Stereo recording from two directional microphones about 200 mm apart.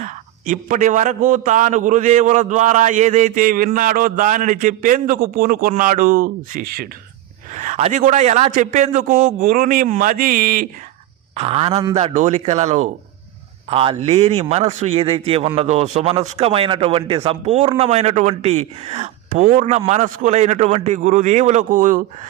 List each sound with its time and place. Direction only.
0.0 s a man's voice: 40° right (ahead or behind)
7.5 s a man's voice: 35° right (ahead or behind)
11.3 s a man's voice: 30° right (ahead or behind)